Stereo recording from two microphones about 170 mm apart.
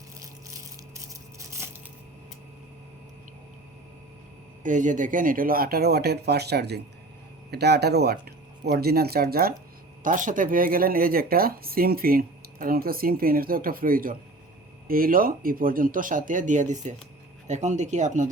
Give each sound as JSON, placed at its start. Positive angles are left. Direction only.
{"t": 1.4, "sound": "a sound", "side_deg": -15}
{"t": 4.6, "sound": "speech", "side_deg": -50}
{"t": 10.0, "sound": "speech", "side_deg": -50}